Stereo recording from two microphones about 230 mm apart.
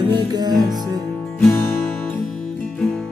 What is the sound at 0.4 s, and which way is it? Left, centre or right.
Music, centre.